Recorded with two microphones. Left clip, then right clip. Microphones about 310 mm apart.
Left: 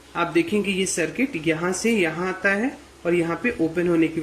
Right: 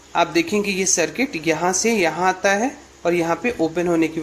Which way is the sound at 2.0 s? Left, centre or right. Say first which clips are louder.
Right 5 dB; centre.